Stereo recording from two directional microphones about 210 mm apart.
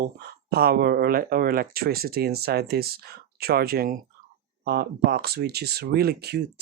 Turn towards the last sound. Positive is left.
turn(degrees=-50)  # may be behind; listen again after turning